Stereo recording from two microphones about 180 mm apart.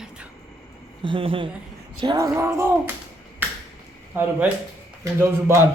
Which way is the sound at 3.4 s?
10° right (ahead or behind).